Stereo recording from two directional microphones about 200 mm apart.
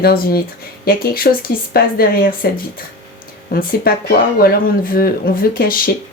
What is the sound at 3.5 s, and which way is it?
Speech, 45° left (ahead or behind).